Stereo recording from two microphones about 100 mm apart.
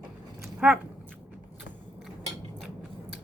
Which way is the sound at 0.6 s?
15° right (ahead or behind).